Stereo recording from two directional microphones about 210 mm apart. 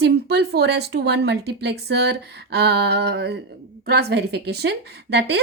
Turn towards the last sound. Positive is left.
turn(degrees=-50)  # may be behind; listen again after turning